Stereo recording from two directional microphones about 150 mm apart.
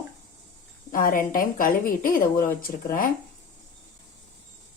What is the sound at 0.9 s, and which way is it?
Speech, 65° left (ahead or behind).